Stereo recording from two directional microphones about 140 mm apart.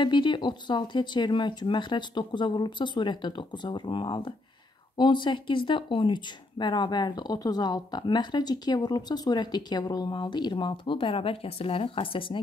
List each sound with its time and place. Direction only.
0.0 s speech: 35° left (ahead or behind)